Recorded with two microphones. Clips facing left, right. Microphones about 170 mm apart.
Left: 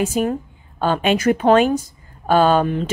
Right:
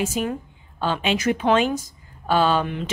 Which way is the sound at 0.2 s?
45° left (ahead or behind).